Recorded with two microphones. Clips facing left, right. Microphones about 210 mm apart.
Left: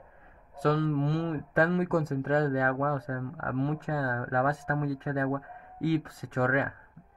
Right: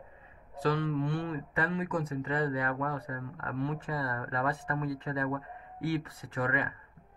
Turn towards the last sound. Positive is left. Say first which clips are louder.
# left 5 dB
turn(degrees=65)  # may be behind; listen again after turning